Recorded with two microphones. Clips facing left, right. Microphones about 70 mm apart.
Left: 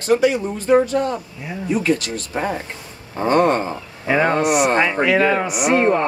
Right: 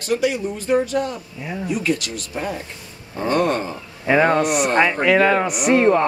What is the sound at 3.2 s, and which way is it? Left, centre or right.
Speech, left.